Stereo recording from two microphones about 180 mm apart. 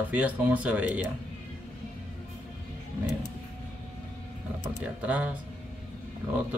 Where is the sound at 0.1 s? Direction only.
10° right (ahead or behind).